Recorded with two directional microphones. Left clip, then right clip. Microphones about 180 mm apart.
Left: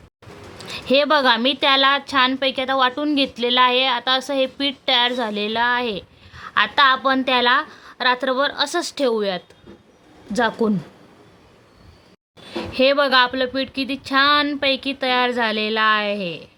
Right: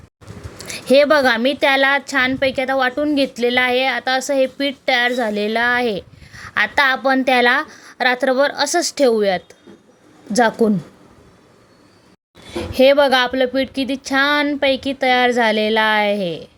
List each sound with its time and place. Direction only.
0.6 s a woman's voice: 15° right (ahead or behind)
12.5 s a woman's voice: 15° right (ahead or behind)